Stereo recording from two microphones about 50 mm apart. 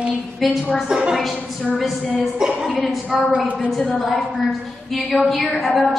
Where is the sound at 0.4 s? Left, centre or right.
Centre.